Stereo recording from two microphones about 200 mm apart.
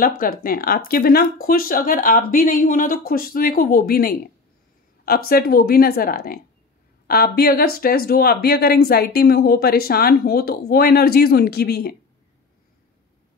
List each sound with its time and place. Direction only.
0.2 s speech: 45° left (ahead or behind)